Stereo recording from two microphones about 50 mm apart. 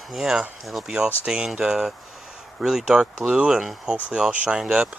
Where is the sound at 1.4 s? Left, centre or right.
Centre.